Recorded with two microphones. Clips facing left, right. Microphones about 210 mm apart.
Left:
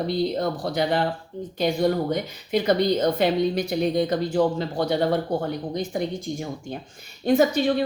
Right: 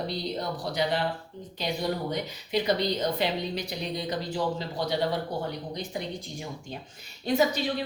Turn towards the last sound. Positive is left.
turn(degrees=50)  # may be behind; listen again after turning